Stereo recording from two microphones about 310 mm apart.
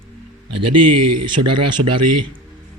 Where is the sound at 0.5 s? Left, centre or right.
Right.